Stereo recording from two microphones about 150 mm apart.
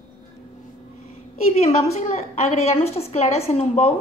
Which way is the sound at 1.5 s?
50° left (ahead or behind).